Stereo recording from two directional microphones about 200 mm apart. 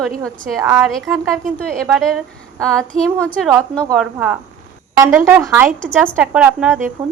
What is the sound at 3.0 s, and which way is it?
A woman's voice, 5° left (ahead or behind).